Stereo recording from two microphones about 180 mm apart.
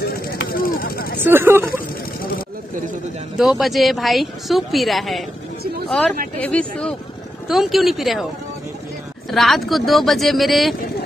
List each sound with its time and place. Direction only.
0.0 s a sound: 60° left (ahead or behind)
1.2 s speech: 10° right (ahead or behind)
3.3 s a woman's voice: centre (ahead or behind)
6.4 s a woman's voice: 5° left (ahead or behind)
9.3 s a woman's voice: centre (ahead or behind)